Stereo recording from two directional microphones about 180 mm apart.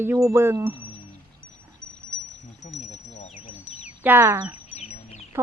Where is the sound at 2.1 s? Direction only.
5° left (ahead or behind).